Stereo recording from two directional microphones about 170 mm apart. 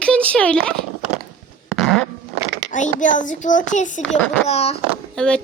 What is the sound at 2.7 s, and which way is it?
A child's voice, 50° left (ahead or behind).